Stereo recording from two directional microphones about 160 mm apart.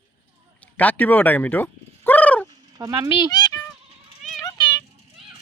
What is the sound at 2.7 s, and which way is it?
Speech, 20° right (ahead or behind).